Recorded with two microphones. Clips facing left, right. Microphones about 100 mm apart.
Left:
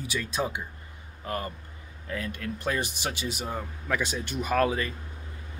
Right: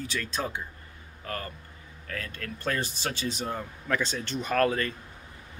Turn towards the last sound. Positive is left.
turn(degrees=10)  # may be behind; listen again after turning